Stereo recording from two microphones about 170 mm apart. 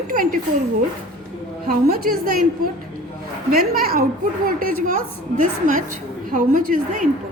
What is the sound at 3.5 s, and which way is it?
A woman's voice, 60° right (ahead or behind).